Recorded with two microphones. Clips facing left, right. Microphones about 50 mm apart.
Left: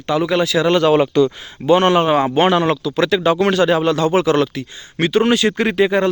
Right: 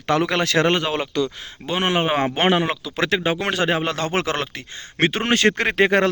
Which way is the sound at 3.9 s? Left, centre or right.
Right.